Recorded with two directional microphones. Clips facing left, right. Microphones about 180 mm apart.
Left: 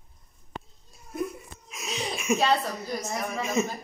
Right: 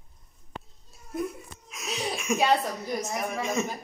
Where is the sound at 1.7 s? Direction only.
Centre (ahead or behind).